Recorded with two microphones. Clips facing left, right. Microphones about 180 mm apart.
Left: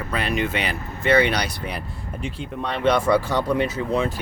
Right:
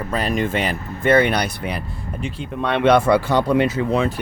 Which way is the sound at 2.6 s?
70° right (ahead or behind).